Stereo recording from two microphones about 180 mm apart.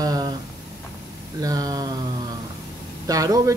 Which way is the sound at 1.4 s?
20° right (ahead or behind).